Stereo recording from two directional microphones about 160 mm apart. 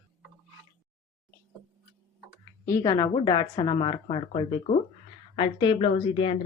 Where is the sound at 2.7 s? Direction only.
25° left (ahead or behind).